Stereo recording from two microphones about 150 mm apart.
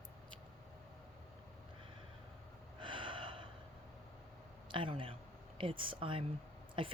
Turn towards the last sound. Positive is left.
turn(degrees=-35)  # may be behind; listen again after turning